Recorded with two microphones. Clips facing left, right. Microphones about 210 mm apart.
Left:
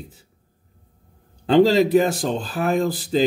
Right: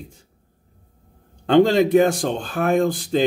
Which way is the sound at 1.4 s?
5° left (ahead or behind).